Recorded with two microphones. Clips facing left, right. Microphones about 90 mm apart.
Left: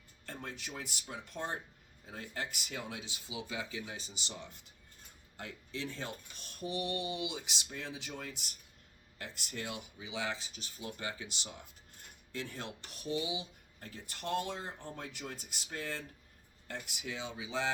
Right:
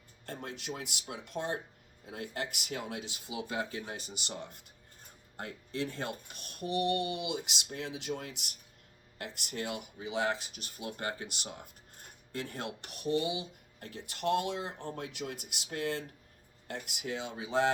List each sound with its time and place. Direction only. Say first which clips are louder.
0.3 s speech: right 4 dB; 60° right (ahead or behind)